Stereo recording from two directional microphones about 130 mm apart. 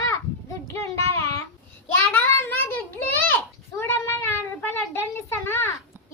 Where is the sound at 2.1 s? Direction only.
20° left (ahead or behind).